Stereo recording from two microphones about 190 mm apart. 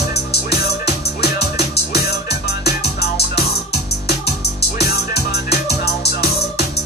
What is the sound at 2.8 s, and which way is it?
Music, 60° left (ahead or behind).